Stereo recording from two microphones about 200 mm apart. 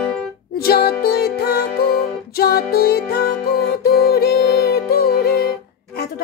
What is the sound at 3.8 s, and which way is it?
Music, 50° left (ahead or behind).